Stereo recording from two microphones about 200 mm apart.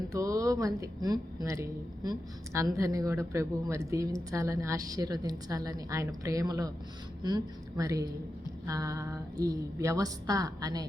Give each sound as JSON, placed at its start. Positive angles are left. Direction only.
{"t": 0.1, "sound": "a woman's voice", "side_deg": -15}